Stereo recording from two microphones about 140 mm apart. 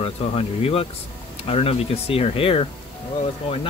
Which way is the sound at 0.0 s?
45° left (ahead or behind).